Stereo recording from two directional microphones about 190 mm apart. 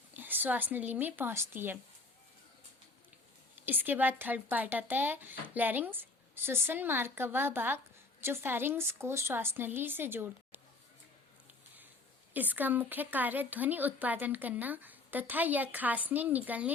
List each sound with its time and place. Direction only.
0.2 s speech: 10° right (ahead or behind)
3.7 s speech: 10° right (ahead or behind)
11.4 s a sound: 10° right (ahead or behind)
12.3 s speech: 10° right (ahead or behind)